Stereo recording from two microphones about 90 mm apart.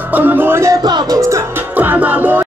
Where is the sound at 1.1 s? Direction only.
35° right (ahead or behind).